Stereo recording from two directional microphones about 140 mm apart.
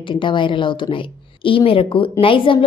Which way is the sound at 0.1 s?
35° left (ahead or behind).